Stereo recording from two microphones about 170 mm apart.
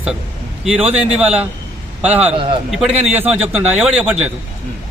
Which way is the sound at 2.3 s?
30° right (ahead or behind).